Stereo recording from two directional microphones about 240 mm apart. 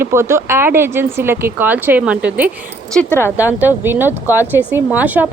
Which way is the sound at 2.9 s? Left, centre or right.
Centre.